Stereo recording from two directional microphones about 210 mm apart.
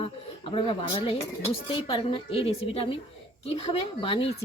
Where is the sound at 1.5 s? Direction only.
25° left (ahead or behind).